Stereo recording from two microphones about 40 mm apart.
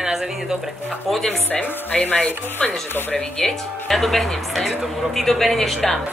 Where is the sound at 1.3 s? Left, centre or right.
Left.